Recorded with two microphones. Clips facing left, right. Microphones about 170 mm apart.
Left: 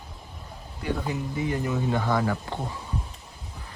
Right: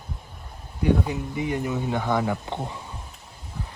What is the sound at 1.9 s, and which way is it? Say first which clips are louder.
Speech: right 2 dB; 15° right (ahead or behind).